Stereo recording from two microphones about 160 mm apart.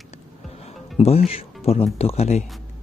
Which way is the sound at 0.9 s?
40° left (ahead or behind).